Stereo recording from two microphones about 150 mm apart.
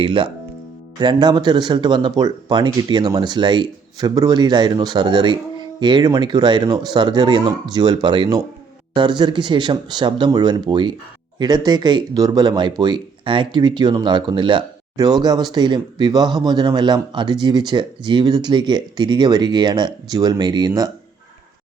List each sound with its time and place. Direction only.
0.0 s speech: 35° right (ahead or behind)